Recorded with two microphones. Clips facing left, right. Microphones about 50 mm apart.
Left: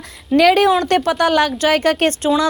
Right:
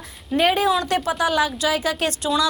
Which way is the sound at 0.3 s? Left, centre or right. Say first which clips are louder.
Left 7 dB; left.